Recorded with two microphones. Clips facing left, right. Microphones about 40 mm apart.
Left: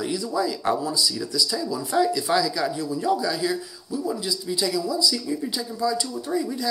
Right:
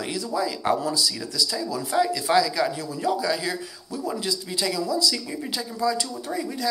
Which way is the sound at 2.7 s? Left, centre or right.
Right.